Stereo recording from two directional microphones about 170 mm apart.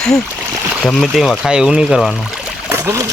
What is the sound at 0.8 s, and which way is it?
Speech, centre (ahead or behind).